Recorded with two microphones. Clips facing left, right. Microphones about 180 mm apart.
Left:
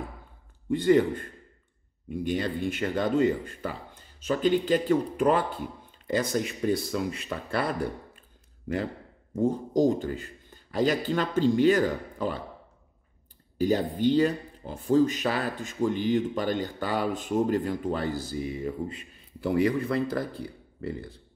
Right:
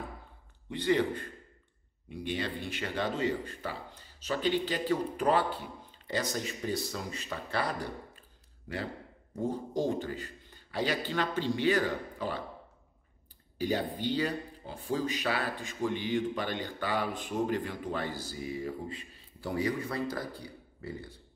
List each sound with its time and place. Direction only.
0.7 s speech: 45° left (ahead or behind)
9.3 s speech: 45° left (ahead or behind)
13.6 s speech: 45° left (ahead or behind)
18.4 s speech: 30° left (ahead or behind)
19.4 s speech: 60° left (ahead or behind)